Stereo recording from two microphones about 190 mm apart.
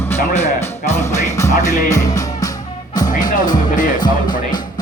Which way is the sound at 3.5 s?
45° left (ahead or behind).